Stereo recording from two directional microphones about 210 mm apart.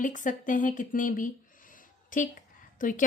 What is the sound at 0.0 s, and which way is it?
Speech, 35° left (ahead or behind).